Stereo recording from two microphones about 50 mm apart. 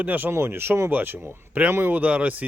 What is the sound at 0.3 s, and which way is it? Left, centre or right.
Speech, right.